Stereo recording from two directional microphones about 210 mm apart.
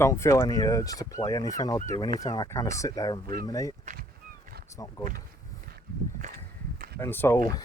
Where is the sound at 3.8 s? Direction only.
35° right (ahead or behind).